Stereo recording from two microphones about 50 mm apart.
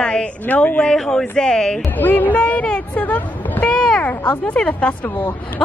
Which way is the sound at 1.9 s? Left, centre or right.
Left.